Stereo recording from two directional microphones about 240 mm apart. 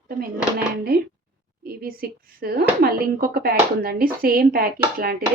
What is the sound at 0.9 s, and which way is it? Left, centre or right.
A woman's voice, right.